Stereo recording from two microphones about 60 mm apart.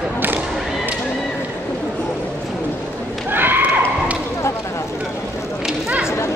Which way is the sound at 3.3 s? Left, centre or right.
Right.